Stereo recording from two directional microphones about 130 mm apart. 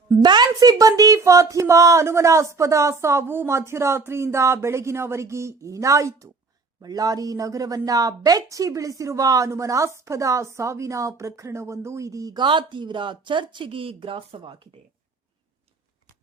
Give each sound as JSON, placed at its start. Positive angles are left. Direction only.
{"t": 0.1, "sound": "speech", "side_deg": -30}